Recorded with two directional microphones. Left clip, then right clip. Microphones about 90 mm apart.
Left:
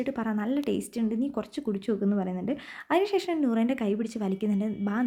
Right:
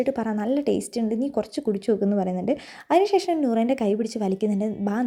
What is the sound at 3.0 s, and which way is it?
Speech, 20° right (ahead or behind).